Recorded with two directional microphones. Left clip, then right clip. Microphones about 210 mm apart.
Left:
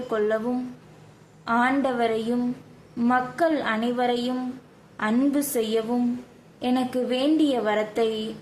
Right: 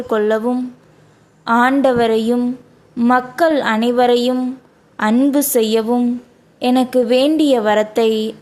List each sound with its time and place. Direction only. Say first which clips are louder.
0.1 s a woman's voice: right 9 dB; 40° right (ahead or behind)